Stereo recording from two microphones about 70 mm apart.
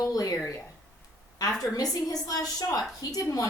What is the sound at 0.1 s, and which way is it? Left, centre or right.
Speech, left.